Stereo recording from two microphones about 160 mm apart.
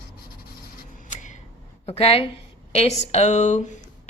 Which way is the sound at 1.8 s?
40° left (ahead or behind).